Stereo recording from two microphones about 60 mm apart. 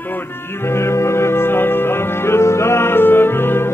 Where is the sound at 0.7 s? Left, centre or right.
Left.